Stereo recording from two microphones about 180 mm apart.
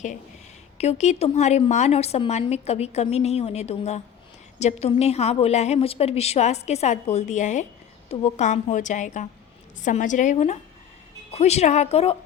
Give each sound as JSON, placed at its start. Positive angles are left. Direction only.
{"t": 0.8, "sound": "a woman's voice", "side_deg": 40}